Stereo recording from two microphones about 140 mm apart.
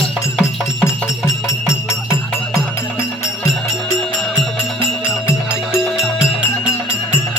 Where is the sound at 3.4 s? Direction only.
Centre (ahead or behind).